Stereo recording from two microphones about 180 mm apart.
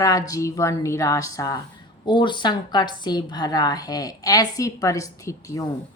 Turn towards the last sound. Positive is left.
turn(degrees=15)  # may be behind; listen again after turning